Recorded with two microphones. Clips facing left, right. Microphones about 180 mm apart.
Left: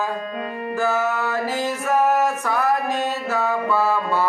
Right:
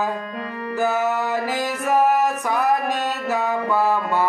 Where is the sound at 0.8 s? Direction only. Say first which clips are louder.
Right 1 dB; 15° right (ahead or behind).